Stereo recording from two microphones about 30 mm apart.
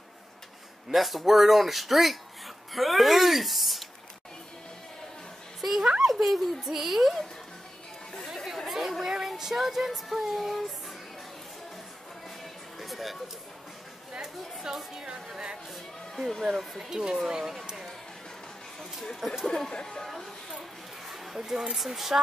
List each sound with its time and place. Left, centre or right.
0.9 s speech: centre
5.6 s speech: centre
8.6 s chatter: centre
9.0 s a sound: centre
9.6 s a woman's voice: centre
12.7 s a sound: centre
14.2 s a woman's voice: centre
16.2 s speech: centre
16.9 s speech: right
19.1 s a woman's voice: centre
19.7 s speech: left
21.1 s a sound: centre
21.7 s a woman's voice: centre